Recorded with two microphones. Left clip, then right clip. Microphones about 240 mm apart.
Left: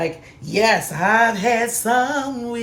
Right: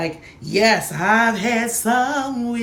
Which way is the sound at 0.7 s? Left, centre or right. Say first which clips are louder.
Left 1 dB; centre.